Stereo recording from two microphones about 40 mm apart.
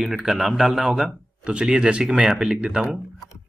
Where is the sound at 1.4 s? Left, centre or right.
Right.